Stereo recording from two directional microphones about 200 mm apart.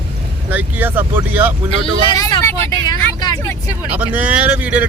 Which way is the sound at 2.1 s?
15° left (ahead or behind).